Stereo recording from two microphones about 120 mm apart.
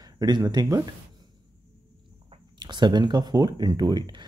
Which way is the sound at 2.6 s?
35° right (ahead or behind).